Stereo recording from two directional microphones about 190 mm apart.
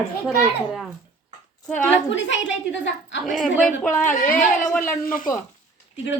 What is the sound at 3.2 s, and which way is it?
A woman's voice, centre (ahead or behind).